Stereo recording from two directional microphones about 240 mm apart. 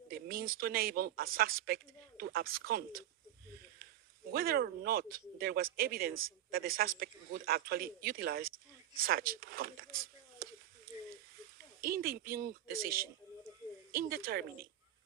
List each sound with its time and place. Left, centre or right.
0.1 s speech: right
4.3 s speech: right
10.4 s a sound: right
11.8 s speech: right